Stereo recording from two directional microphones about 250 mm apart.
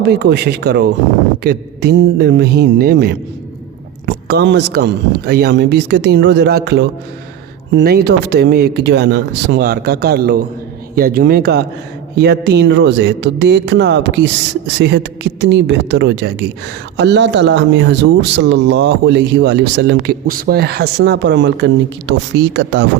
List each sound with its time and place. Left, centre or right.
0.0 s speech: right